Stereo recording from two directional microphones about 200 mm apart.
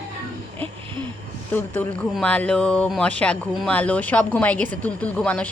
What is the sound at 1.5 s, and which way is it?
Speech, 10° left (ahead or behind).